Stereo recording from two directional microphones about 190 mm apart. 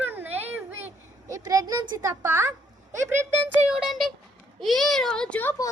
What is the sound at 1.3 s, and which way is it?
A child's voice, 20° right (ahead or behind).